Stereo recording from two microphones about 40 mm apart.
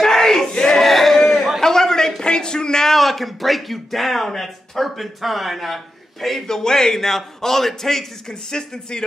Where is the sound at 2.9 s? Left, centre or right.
Centre.